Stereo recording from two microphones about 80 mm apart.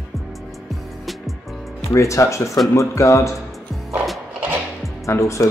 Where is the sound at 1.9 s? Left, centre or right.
Left.